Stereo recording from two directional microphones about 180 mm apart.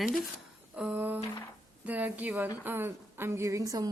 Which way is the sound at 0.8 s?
10° right (ahead or behind).